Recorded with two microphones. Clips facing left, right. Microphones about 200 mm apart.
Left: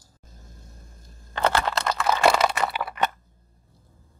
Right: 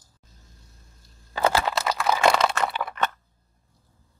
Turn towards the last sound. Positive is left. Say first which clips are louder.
# left 1 dB
turn(degrees=10)  # may be behind; listen again after turning